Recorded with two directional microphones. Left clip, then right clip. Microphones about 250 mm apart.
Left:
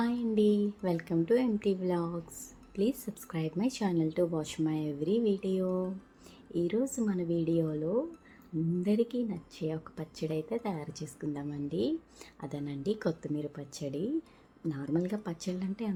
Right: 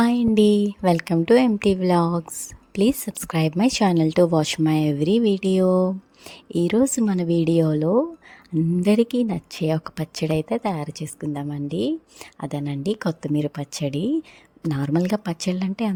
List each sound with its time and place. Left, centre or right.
0.0 s a woman's voice: right